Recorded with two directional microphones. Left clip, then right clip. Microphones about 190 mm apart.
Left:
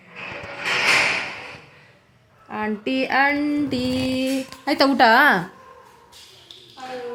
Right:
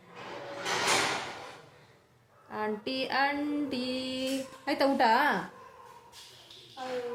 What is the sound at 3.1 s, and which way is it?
Speech, 50° left (ahead or behind).